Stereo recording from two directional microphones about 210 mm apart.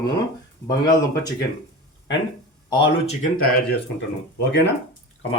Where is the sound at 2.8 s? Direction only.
30° left (ahead or behind).